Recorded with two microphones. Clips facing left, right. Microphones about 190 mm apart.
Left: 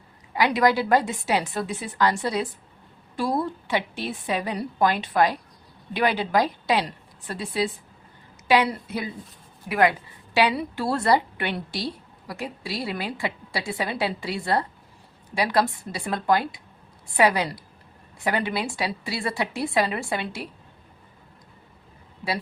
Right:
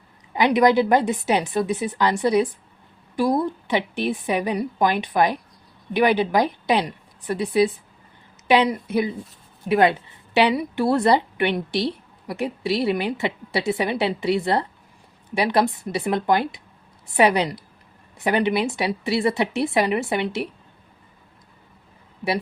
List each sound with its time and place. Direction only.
0.3 s a woman's voice: 20° right (ahead or behind)